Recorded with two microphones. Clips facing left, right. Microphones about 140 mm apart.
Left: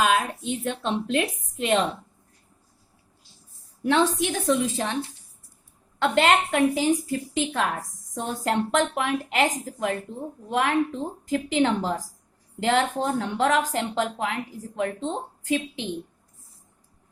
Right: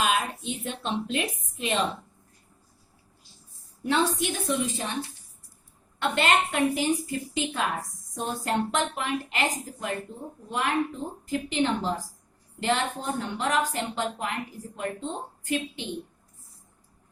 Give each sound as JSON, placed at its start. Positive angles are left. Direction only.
{"t": 0.6, "sound": "speech", "side_deg": 70}
{"t": 3.8, "sound": "a woman's voice", "side_deg": 90}
{"t": 6.0, "sound": "a woman's voice", "side_deg": 85}
{"t": 15.4, "sound": "a woman's voice", "side_deg": 90}